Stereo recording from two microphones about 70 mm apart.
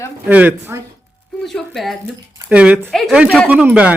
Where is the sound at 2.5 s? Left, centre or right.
Centre.